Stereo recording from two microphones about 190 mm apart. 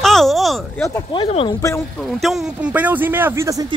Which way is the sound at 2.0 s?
Centre (ahead or behind).